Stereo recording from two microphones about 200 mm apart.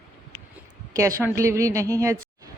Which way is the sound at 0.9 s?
15° right (ahead or behind).